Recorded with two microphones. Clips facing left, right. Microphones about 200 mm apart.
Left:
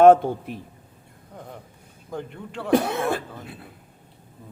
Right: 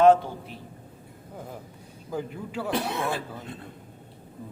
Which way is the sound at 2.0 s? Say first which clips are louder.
Right 1 dB; 5° right (ahead or behind).